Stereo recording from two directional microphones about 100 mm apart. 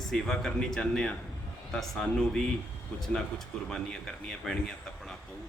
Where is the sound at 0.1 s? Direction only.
5° left (ahead or behind).